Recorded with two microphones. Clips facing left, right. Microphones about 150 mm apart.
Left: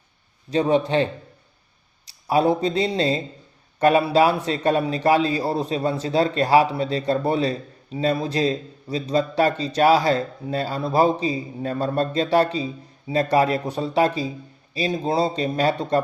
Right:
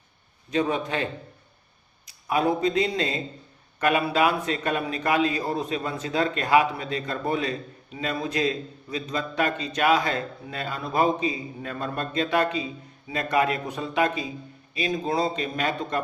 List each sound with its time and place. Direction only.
0.5 s a man's voice: 30° left (ahead or behind)
2.0 s a man's voice: 30° left (ahead or behind)